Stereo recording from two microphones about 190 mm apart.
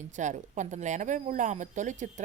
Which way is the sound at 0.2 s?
40° right (ahead or behind).